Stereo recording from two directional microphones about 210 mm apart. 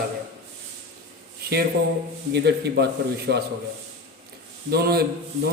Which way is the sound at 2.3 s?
50° right (ahead or behind).